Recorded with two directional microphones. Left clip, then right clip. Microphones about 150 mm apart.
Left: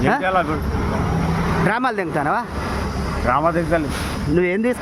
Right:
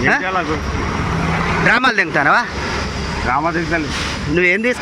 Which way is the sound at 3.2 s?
40° left (ahead or behind).